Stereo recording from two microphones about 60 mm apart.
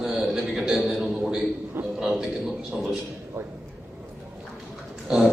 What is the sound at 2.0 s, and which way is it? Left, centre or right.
Speech, centre.